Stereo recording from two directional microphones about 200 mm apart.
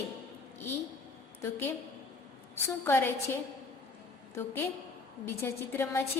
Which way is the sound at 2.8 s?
10° left (ahead or behind).